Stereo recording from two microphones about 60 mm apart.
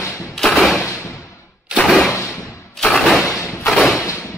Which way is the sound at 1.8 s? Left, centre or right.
Centre.